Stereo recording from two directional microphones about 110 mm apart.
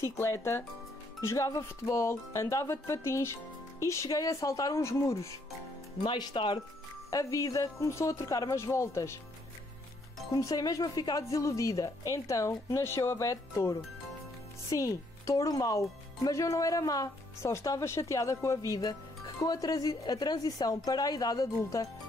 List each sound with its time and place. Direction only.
0.2 s speech: 25° left (ahead or behind)
6.0 s speech: 45° left (ahead or behind)
7.1 s speech: 30° left (ahead or behind)
10.3 s speech: 35° left (ahead or behind)